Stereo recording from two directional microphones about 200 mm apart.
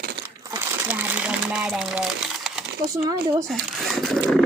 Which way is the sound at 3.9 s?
5° left (ahead or behind).